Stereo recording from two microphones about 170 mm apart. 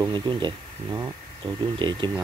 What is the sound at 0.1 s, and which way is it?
Speech, 25° right (ahead or behind).